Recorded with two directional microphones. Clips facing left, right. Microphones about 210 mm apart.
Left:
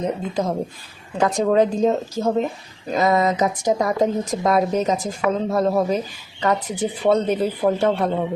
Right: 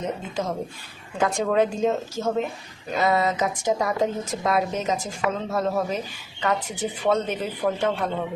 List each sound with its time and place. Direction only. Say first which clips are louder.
0.0 s speech: left 5 dB; 35° left (ahead or behind)